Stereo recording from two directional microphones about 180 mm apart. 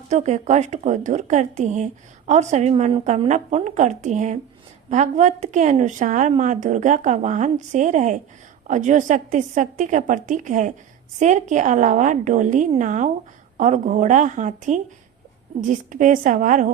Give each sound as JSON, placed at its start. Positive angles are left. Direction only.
{"t": 0.1, "sound": "a woman's voice", "side_deg": -40}